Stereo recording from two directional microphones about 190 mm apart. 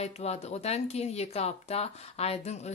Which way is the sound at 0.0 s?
35° left (ahead or behind).